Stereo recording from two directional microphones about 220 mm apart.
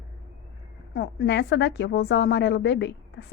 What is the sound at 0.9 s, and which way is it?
A woman's voice, 50° left (ahead or behind).